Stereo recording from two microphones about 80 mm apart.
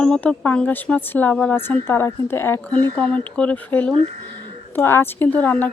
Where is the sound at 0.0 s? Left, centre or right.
Centre.